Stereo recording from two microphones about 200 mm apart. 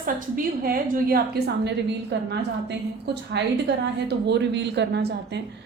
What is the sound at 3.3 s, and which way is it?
A woman's voice, 55° right (ahead or behind).